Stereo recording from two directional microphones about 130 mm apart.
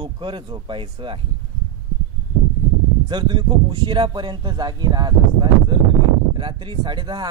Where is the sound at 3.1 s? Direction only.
35° right (ahead or behind).